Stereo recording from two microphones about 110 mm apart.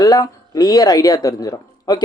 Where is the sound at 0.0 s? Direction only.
35° left (ahead or behind).